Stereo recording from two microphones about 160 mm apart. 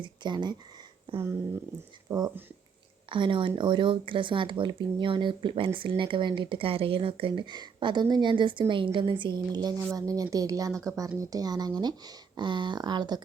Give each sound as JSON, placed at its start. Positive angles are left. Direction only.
{"t": 0.0, "sound": "speech", "side_deg": -30}
{"t": 2.0, "sound": "speech", "side_deg": -25}